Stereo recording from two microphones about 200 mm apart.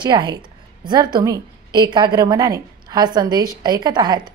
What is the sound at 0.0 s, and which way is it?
A woman's voice, 20° right (ahead or behind).